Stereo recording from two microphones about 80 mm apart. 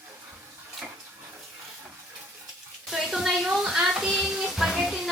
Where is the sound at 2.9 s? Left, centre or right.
Centre.